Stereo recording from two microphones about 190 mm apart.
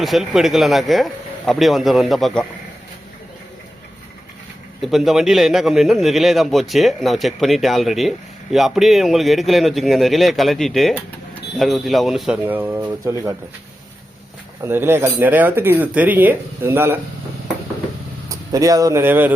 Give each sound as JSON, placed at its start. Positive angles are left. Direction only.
{"t": 0.0, "sound": "a man's voice", "side_deg": 0}
{"t": 4.8, "sound": "a man's voice", "side_deg": 0}
{"t": 14.6, "sound": "speech", "side_deg": -10}
{"t": 18.5, "sound": "speech", "side_deg": -20}